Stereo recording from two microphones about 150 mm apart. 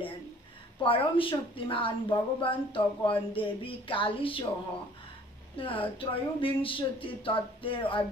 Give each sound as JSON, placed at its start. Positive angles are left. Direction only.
{"t": 0.7, "sound": "speech", "side_deg": 35}
{"t": 5.6, "sound": "speech", "side_deg": 35}